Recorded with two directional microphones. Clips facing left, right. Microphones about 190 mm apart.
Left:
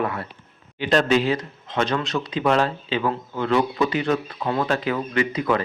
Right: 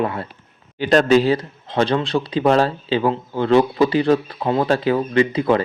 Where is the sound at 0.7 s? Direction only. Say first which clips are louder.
Right 5 dB; 40° right (ahead or behind).